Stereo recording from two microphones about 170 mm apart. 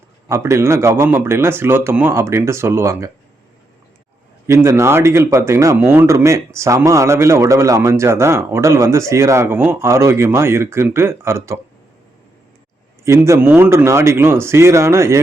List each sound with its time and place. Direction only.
0.3 s speech: 15° right (ahead or behind)
4.4 s speech: 15° right (ahead or behind)
13.1 s speech: 15° right (ahead or behind)